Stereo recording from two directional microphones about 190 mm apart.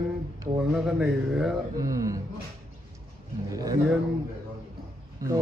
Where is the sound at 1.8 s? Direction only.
20° right (ahead or behind).